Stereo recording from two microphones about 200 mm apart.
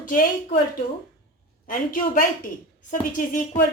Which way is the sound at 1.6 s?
45° left (ahead or behind).